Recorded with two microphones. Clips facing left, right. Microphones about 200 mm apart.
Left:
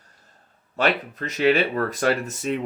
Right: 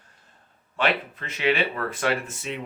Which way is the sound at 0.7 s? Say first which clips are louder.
Left 2 dB; 40° left (ahead or behind).